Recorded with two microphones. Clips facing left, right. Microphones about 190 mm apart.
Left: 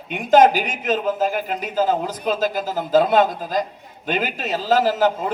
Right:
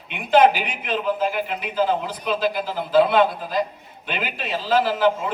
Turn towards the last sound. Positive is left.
turn(degrees=40)  # may be behind; listen again after turning